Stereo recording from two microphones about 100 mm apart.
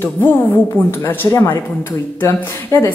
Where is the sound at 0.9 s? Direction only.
25° left (ahead or behind).